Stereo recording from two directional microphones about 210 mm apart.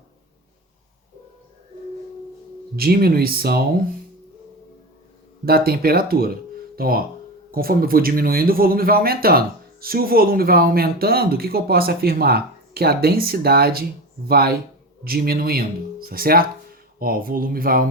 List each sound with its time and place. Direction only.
2.7 s speech: 45° right (ahead or behind)
5.5 s speech: 45° right (ahead or behind)